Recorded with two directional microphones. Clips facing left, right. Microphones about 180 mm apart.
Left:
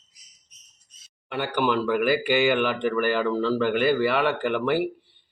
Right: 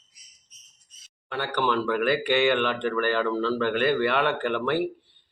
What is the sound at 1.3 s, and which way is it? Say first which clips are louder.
Speech: left 2 dB; 10° left (ahead or behind).